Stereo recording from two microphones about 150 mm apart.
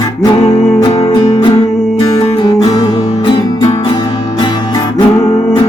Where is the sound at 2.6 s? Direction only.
25° left (ahead or behind).